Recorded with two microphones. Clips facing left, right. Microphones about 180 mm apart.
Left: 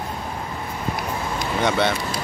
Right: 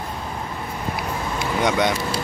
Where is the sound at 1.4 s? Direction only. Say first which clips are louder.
Right 1 dB; 15° right (ahead or behind).